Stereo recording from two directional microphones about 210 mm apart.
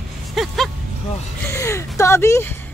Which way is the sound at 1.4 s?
15° left (ahead or behind).